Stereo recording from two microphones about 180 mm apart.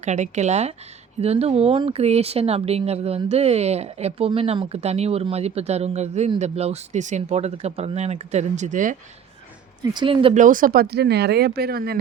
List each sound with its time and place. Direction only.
0.0 s speech: 40° right (ahead or behind)
9.8 s speech: 25° right (ahead or behind)
10.3 s speech: 45° right (ahead or behind)